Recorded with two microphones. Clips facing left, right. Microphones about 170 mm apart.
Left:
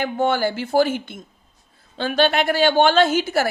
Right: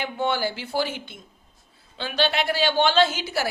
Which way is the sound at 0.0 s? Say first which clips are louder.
Left 5 dB; 50° left (ahead or behind).